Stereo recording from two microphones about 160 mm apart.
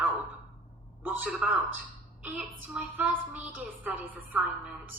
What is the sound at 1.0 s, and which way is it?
Speech, 10° right (ahead or behind).